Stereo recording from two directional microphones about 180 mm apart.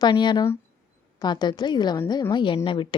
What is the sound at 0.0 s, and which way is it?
A woman's voice, 25° left (ahead or behind).